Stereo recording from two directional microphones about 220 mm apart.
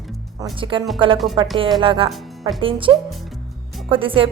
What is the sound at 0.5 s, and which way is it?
A woman's voice, 25° right (ahead or behind).